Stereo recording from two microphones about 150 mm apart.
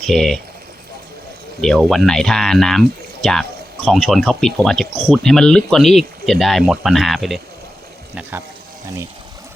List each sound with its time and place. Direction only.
0.0 s speech: centre (ahead or behind)
1.9 s speech: centre (ahead or behind)